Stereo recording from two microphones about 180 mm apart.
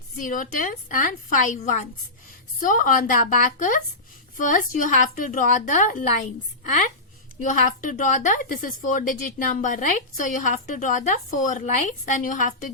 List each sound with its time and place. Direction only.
0.2 s a woman's voice: 50° left (ahead or behind)